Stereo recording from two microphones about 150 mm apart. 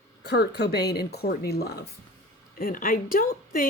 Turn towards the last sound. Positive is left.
turn(degrees=70)  # may be behind; listen again after turning